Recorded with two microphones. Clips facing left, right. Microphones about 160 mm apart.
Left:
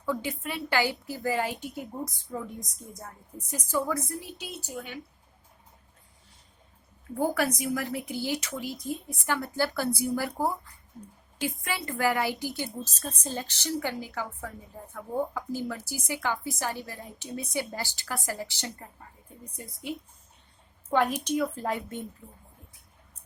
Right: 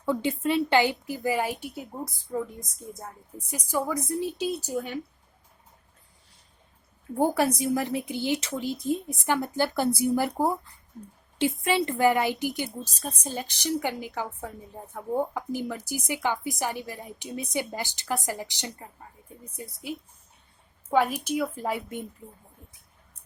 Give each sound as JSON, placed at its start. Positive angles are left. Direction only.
{"t": 0.0, "sound": "a woman's voice", "side_deg": -25}
{"t": 3.7, "sound": "a woman's voice", "side_deg": -15}
{"t": 4.2, "sound": "speech", "side_deg": -30}
{"t": 7.2, "sound": "a woman's voice", "side_deg": -25}
{"t": 19.5, "sound": "a woman's voice", "side_deg": 0}